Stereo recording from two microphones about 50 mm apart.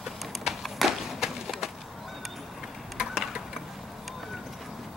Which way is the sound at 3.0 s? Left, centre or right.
Centre.